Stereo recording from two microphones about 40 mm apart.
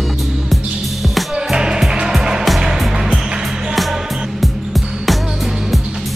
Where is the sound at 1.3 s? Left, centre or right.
Centre.